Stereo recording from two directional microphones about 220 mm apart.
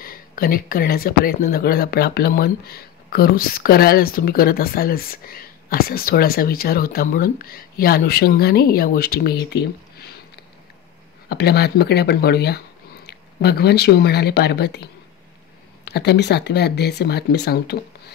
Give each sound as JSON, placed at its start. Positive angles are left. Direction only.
{"t": 0.0, "sound": "speech", "side_deg": 40}
{"t": 11.2, "sound": "speech", "side_deg": 45}